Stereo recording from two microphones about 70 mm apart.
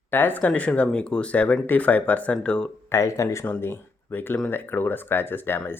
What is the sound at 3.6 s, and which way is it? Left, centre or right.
Speech, left.